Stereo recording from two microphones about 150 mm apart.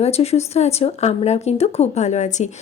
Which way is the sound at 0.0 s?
45° left (ahead or behind).